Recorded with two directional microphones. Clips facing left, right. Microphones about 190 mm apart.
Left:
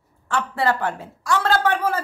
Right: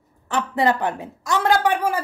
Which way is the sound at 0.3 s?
20° right (ahead or behind).